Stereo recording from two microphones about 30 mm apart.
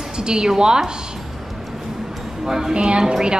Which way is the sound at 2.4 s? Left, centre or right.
Centre.